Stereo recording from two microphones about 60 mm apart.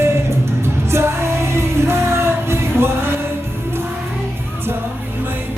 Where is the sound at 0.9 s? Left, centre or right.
Right.